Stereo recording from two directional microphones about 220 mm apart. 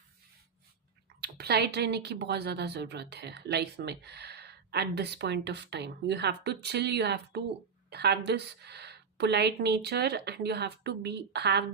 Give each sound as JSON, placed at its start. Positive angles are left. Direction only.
{"t": 1.2, "sound": "a woman's voice", "side_deg": -45}